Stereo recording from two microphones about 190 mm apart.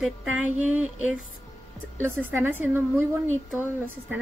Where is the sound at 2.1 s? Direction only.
10° right (ahead or behind).